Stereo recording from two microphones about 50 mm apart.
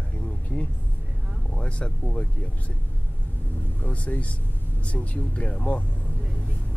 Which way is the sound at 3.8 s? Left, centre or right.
Left.